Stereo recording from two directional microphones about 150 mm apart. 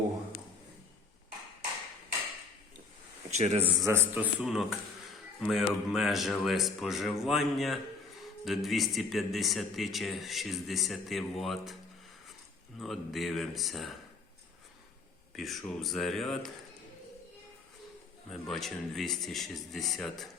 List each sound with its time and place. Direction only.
3.3 s speech: 45° right (ahead or behind)
3.8 s a man's voice: 15° right (ahead or behind)
12.8 s speech: centre (ahead or behind)
15.4 s speech: centre (ahead or behind)
18.3 s speech: centre (ahead or behind)